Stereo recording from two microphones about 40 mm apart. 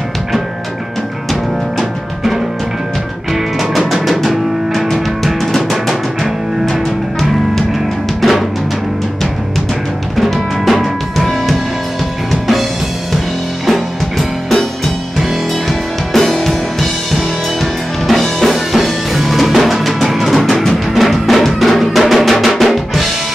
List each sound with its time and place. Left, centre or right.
3.7 s music: centre
8.2 s drum: centre
10.1 s music: centre
13.7 s music: centre
18.0 s music: centre